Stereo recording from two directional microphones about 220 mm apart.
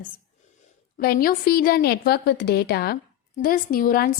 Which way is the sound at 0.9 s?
45° left (ahead or behind).